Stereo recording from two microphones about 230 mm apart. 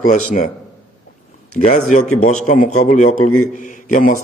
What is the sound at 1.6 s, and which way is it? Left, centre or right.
A man's voice, left.